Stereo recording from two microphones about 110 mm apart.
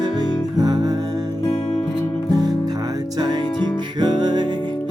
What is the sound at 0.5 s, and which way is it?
Music, 35° right (ahead or behind).